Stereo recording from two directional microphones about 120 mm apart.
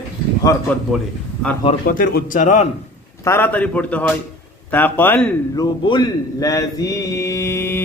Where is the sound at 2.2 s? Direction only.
90° left.